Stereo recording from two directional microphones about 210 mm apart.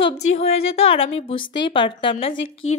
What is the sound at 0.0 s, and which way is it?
A woman's voice, 25° left (ahead or behind).